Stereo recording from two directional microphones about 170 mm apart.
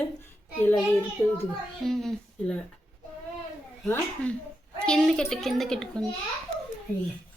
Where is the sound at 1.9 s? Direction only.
Centre (ahead or behind).